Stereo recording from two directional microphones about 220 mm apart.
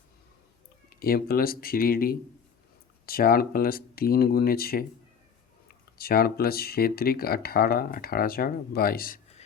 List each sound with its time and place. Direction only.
0.9 s speech: 45° left (ahead or behind)